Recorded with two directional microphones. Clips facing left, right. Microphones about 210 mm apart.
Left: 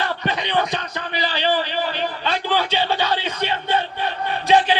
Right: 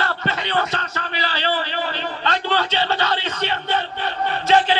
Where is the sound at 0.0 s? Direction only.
15° left (ahead or behind).